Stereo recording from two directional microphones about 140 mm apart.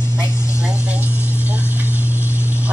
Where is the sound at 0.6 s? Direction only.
10° right (ahead or behind).